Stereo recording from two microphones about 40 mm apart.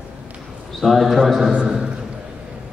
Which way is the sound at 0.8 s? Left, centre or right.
Centre.